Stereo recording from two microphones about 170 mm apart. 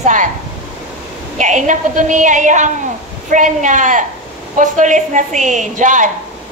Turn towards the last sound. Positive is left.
turn(degrees=-50)  # may be behind; listen again after turning